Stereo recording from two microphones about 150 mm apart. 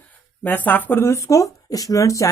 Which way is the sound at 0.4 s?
10° left (ahead or behind).